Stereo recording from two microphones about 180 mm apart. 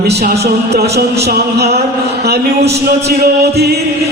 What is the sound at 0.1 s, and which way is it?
Music, 60° right (ahead or behind).